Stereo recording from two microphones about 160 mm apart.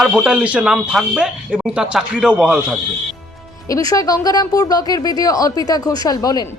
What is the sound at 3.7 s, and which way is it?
Speech, 20° left (ahead or behind).